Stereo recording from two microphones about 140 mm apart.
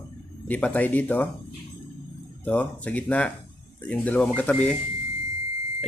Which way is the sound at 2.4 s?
10° left (ahead or behind).